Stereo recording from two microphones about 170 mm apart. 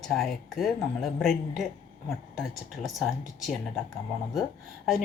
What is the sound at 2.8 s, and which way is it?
Speech, centre (ahead or behind).